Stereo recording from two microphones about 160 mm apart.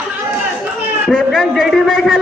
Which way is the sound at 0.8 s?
5° right (ahead or behind).